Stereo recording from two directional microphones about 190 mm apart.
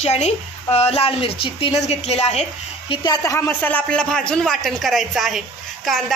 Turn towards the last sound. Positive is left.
turn(degrees=0)  # may be behind; listen again after turning